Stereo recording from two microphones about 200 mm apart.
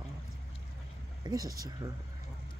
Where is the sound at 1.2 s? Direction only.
20° right (ahead or behind).